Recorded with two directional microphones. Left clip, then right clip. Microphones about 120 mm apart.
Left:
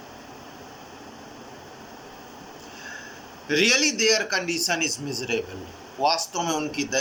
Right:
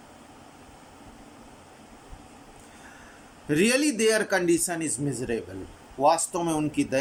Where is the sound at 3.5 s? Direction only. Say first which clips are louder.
Left 3 dB; 90° right; by 5.4 s 70° right (ahead or behind).